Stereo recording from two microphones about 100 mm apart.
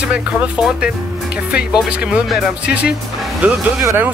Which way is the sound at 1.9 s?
10° right (ahead or behind).